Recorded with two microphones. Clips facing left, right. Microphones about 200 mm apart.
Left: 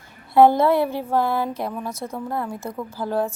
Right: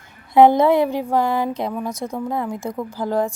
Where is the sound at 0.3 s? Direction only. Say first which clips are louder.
Right 2 dB; 15° right (ahead or behind).